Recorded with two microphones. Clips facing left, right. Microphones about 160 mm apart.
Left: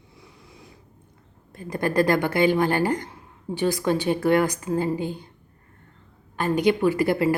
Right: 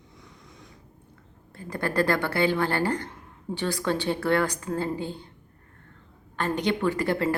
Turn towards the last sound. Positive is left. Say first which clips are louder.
# left 4 dB
turn(degrees=10)  # may be behind; listen again after turning